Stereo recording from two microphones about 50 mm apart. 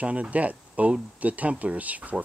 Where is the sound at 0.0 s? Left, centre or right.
Right.